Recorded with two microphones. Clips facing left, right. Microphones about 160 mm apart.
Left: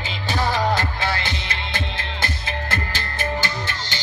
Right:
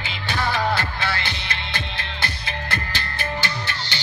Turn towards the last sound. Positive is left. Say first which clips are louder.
# left 1 dB
turn(degrees=45)  # may be behind; listen again after turning